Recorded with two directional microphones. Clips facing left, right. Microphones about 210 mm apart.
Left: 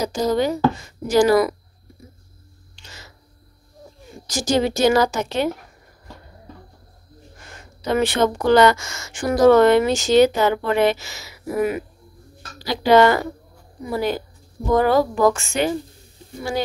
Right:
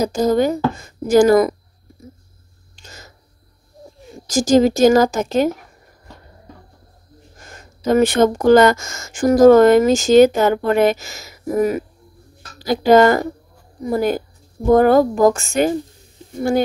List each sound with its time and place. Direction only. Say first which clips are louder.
0.0 s speech: right 4 dB; 50° right (ahead or behind)
2.8 s a sound: right 3 dB; 45° right (ahead or behind)
4.3 s speech: right 7 dB; 45° right (ahead or behind)
7.3 s speech: right 3 dB; 45° right (ahead or behind)